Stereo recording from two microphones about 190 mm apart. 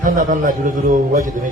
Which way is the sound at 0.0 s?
40° right (ahead or behind).